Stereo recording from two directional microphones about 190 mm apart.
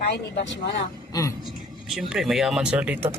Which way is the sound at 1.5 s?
Centre (ahead or behind).